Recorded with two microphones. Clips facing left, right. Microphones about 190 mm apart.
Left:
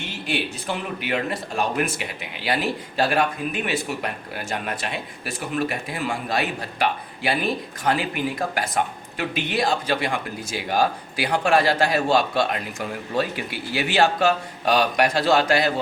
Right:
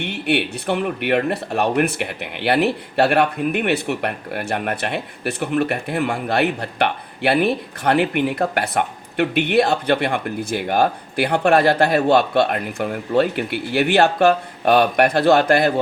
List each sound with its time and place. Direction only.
0.0 s speech: 65° right (ahead or behind)